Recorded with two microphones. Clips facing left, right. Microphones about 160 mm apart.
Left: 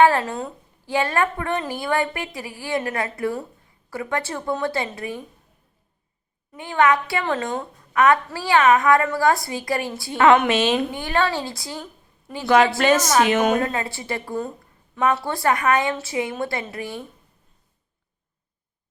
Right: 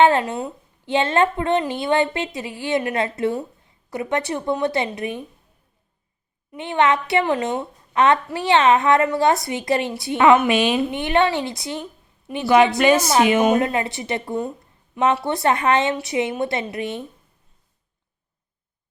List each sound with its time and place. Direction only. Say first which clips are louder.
0.0 s a woman's voice: right 1 dB; 20° right (ahead or behind)
6.6 s a woman's voice: even; 25° right (ahead or behind)
7.6 s a woman's voice: even; 25° right (ahead or behind)